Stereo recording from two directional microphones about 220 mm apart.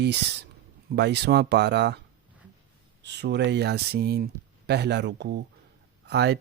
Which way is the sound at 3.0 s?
50° right (ahead or behind).